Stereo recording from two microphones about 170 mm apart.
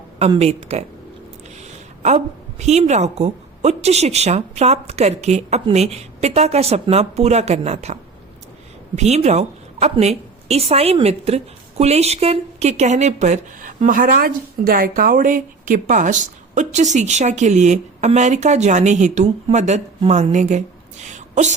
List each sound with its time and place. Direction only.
0.2 s a woman's voice: 35° right (ahead or behind)
2.0 s a woman's voice: 40° right (ahead or behind)
9.0 s a woman's voice: 40° right (ahead or behind)